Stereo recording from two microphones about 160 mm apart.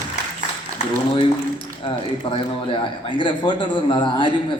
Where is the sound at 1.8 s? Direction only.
35° left (ahead or behind).